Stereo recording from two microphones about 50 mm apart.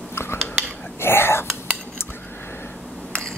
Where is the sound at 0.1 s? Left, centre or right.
Left.